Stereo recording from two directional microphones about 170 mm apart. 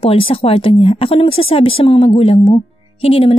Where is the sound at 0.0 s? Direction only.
30° left (ahead or behind).